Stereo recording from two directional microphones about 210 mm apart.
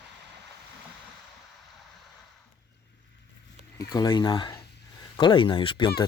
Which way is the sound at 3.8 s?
20° left (ahead or behind).